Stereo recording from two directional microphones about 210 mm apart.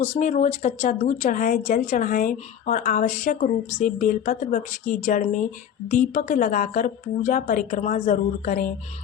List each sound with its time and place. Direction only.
0.0 s speech: 35° left (ahead or behind)